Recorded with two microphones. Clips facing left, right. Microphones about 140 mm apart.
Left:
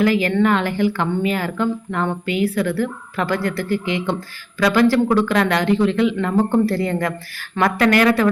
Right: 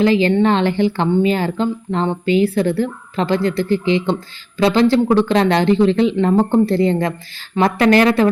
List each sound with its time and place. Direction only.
0.0 s speech: 25° right (ahead or behind)